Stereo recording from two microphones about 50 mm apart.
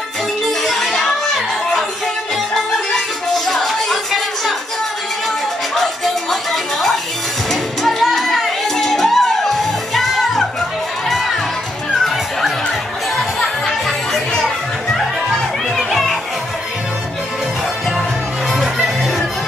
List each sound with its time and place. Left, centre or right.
0.5 s music: centre
2.5 s music: centre
6.5 s music: centre
15.0 s music: centre
18.5 s music: centre